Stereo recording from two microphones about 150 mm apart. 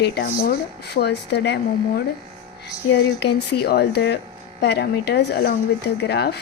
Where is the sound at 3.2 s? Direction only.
90° left.